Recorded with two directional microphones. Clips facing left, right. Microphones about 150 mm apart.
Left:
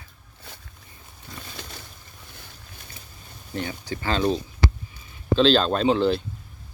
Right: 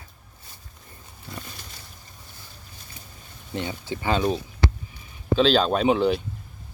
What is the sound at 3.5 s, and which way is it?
Speech, 20° right (ahead or behind).